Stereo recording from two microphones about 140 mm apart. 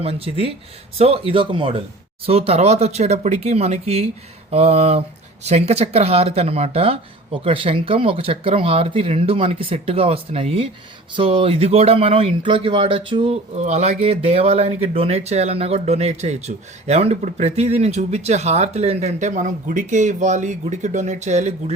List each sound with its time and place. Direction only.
0.0 s speech: 45° right (ahead or behind)
13.3 s speech: 55° right (ahead or behind)